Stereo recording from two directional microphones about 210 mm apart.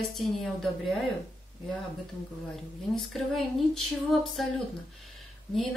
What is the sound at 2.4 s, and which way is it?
A woman's voice, centre (ahead or behind).